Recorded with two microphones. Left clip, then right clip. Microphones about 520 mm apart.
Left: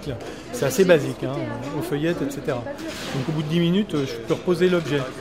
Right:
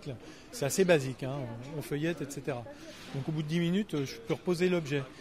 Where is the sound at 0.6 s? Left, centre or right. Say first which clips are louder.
Left 9 dB; right.